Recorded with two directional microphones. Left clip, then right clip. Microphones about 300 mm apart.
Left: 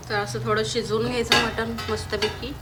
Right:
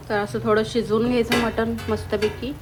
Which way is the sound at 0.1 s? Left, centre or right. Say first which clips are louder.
Right 4 dB; centre.